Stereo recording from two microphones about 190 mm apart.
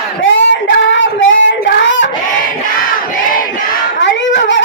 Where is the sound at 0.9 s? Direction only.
80° left.